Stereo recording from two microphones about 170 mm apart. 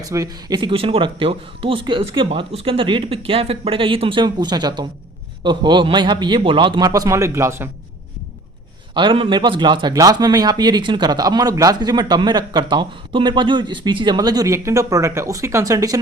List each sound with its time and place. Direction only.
0.0 s a man's voice: 20° right (ahead or behind)
9.0 s a man's voice: 30° right (ahead or behind)